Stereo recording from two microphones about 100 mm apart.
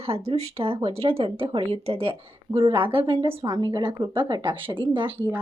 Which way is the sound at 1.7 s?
70° right (ahead or behind).